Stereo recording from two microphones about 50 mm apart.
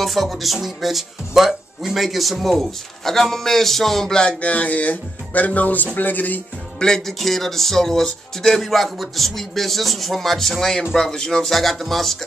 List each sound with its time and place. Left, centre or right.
0.0 s speech: centre
4.5 s speech: left
6.8 s speech: centre